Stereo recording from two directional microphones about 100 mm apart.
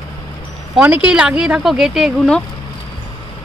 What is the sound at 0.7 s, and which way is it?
Speech, 15° right (ahead or behind).